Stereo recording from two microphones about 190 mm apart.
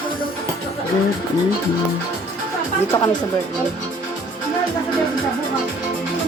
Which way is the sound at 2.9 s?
20° left (ahead or behind).